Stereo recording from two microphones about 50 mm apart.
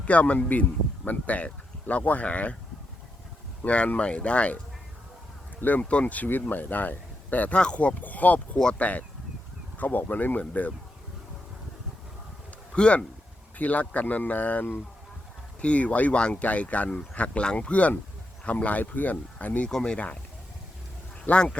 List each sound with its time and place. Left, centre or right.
0.0 s speech: left
3.6 s speech: left
7.6 s speech: left
8.0 s speech: left
12.7 s speech: left
15.6 s speech: left
19.6 s speech: centre
21.2 s speech: left